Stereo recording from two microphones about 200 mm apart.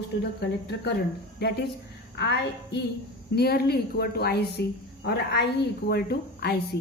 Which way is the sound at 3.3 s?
50° left (ahead or behind).